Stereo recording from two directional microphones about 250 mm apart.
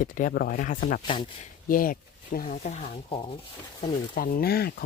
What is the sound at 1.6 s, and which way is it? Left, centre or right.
Speech, left.